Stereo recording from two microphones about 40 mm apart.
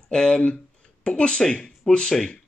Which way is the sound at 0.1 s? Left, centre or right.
Centre.